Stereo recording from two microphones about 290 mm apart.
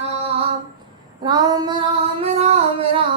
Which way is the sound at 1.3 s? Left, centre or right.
Centre.